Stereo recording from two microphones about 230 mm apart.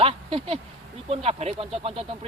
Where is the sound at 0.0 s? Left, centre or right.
Right.